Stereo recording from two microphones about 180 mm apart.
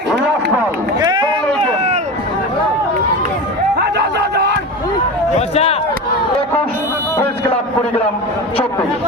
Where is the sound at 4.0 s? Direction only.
65° right (ahead or behind).